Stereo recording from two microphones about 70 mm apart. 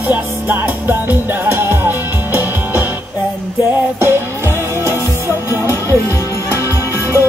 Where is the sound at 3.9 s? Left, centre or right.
Right.